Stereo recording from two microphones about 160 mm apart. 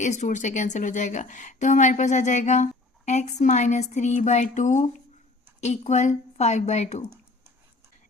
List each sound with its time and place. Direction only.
0.0 s a woman's voice: 50° left (ahead or behind)